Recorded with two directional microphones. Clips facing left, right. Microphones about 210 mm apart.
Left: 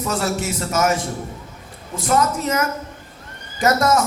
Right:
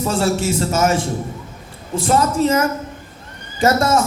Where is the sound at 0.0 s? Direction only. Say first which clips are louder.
Right 4 dB; 30° right (ahead or behind).